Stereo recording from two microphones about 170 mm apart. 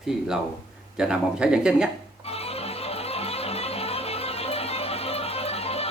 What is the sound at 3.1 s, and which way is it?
Music, 35° left (ahead or behind).